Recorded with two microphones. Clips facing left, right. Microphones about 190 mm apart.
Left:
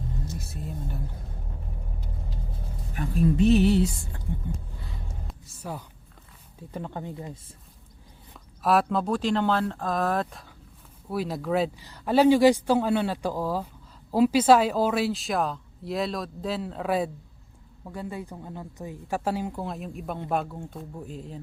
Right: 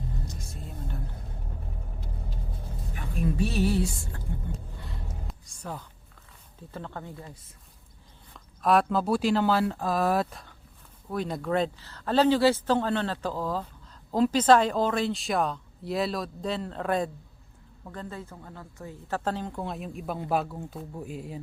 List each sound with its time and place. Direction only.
0.3 s music: 5° left (ahead or behind)
3.3 s music: 20° left (ahead or behind)
4.8 s music: centre (ahead or behind)
6.6 s speech: 15° left (ahead or behind)
8.6 s speech: centre (ahead or behind)